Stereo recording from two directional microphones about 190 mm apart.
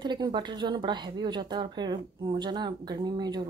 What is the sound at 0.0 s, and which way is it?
A woman's voice, 25° right (ahead or behind).